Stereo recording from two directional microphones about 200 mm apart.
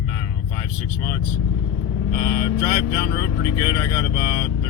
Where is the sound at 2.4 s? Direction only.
15° left (ahead or behind).